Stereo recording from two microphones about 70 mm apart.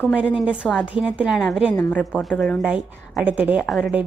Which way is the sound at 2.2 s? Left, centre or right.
Centre.